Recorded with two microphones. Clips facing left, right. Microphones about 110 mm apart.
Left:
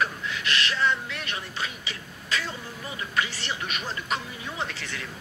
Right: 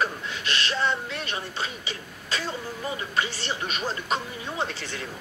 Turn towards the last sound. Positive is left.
turn(degrees=-30)  # may be behind; listen again after turning